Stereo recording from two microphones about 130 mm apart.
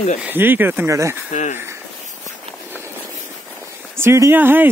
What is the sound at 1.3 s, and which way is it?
Speech, 65° left (ahead or behind).